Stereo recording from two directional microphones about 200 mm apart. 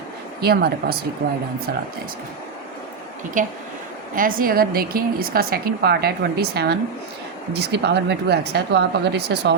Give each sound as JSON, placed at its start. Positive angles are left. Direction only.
{"t": 0.4, "sound": "speech", "side_deg": -50}
{"t": 3.4, "sound": "speech", "side_deg": -40}